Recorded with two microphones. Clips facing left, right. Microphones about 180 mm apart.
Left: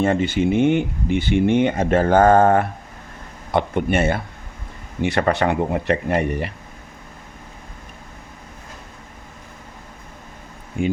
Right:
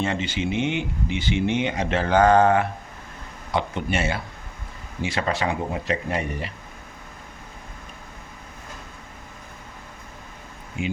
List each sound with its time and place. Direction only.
0.0 s speech: 55° left (ahead or behind)